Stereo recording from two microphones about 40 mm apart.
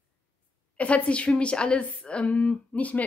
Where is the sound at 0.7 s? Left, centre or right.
Left.